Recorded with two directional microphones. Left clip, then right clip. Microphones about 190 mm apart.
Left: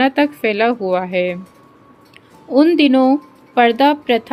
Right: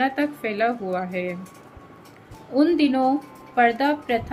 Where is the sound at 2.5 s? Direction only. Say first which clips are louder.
Left 8 dB; 40° left (ahead or behind).